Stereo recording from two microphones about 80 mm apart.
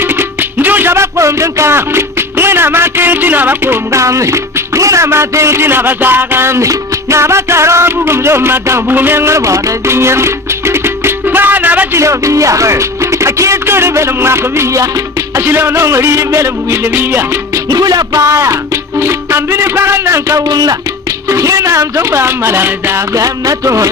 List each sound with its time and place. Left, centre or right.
0.0 s music: right
11.9 s speech: right
17.6 s speech: right
20.4 s music: right
21.3 s speech: right
23.1 s speech: right